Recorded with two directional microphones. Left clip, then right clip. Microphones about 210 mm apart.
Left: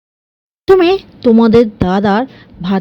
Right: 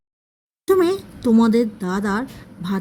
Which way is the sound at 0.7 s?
25° left (ahead or behind).